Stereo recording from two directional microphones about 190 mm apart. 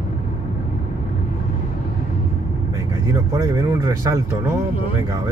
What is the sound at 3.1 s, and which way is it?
Speech, 20° right (ahead or behind).